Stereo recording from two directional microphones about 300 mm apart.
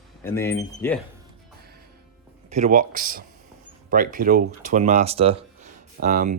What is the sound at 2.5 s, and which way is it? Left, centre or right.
Speech, right.